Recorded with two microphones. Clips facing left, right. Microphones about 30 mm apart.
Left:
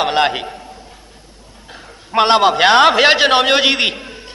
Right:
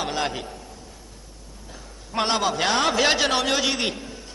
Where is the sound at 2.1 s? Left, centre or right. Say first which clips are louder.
Left 11 dB; left.